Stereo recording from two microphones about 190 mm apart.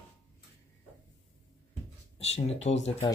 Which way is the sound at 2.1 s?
35° left (ahead or behind).